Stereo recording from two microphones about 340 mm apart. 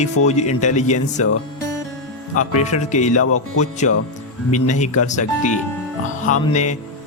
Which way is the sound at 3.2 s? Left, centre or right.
Left.